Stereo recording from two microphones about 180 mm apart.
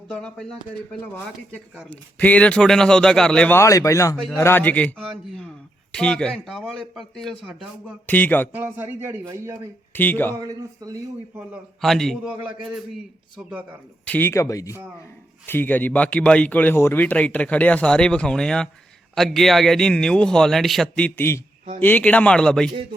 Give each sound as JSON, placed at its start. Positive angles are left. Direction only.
{"t": 0.1, "sound": "a man's voice", "side_deg": 5}
{"t": 1.9, "sound": "a man's voice", "side_deg": 10}
{"t": 8.0, "sound": "a man's voice", "side_deg": 10}
{"t": 8.5, "sound": "speech", "side_deg": -10}
{"t": 9.9, "sound": "a man's voice", "side_deg": 10}
{"t": 10.4, "sound": "a man's voice", "side_deg": -20}
{"t": 11.8, "sound": "a man's voice", "side_deg": 0}
{"t": 14.0, "sound": "a man's voice", "side_deg": 10}